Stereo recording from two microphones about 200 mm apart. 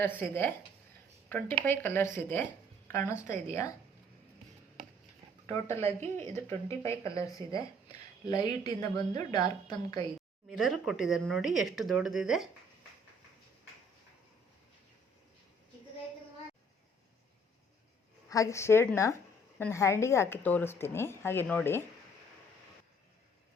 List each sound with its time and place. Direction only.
0.0 s speech: 10° left (ahead or behind)
6.0 s a woman's voice: 15° left (ahead or behind)
10.5 s speech: centre (ahead or behind)
18.3 s speech: 15° left (ahead or behind)